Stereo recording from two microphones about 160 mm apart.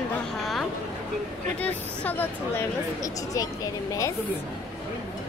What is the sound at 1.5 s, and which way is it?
Speech, 10° left (ahead or behind).